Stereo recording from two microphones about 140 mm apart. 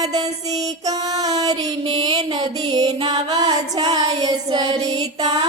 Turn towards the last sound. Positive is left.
turn(degrees=-30)  # may be behind; listen again after turning